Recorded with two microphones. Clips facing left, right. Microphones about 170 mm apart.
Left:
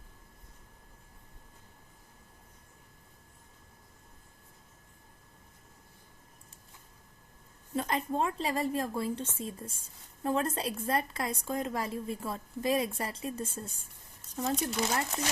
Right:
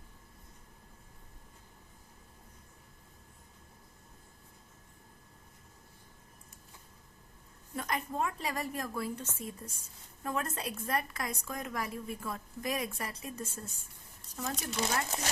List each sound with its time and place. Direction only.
7.8 s a woman's voice: 30° left (ahead or behind)